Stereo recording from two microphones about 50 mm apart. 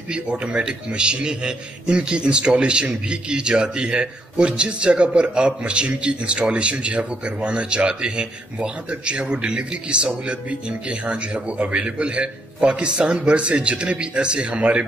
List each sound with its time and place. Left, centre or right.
0.1 s a man's voice: right